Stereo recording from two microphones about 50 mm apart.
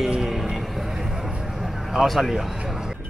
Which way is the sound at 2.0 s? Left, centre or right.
Centre.